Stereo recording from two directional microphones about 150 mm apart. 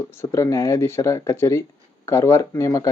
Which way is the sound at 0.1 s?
20° left (ahead or behind).